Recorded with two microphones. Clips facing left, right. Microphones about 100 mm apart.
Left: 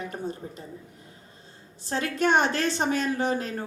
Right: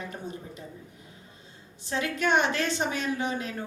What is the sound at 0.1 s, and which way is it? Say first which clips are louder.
Speech: left 4 dB; 40° left (ahead or behind).